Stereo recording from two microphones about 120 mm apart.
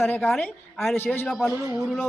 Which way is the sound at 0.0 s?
15° left (ahead or behind).